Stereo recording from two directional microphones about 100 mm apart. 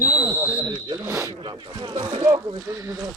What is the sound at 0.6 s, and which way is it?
Speech, 50° right (ahead or behind).